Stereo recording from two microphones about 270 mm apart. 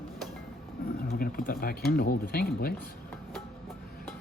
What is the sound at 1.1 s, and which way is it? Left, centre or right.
Speech, left.